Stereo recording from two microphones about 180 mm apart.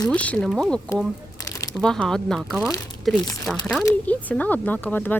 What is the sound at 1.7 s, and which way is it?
Speech, 5° left (ahead or behind).